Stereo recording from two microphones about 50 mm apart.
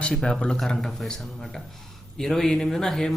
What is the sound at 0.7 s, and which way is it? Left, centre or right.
Speech, centre.